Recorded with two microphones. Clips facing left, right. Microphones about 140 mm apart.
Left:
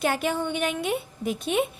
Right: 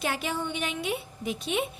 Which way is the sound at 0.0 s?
50° left (ahead or behind).